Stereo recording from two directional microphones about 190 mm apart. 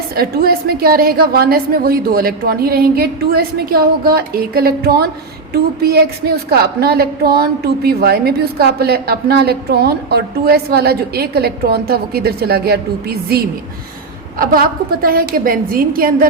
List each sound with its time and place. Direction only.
0.2 s a woman's voice: 55° right (ahead or behind)